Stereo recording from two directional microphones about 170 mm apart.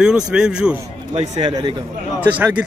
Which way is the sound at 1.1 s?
35° right (ahead or behind).